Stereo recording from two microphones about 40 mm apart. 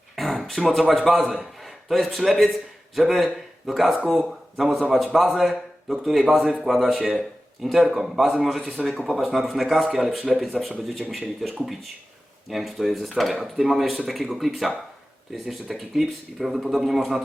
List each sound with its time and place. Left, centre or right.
0.2 s a sound: centre
0.7 s a man's voice: centre
10.2 s a man's voice: centre